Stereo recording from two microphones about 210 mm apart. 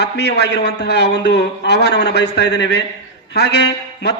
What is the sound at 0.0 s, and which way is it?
A man's voice, 50° left (ahead or behind).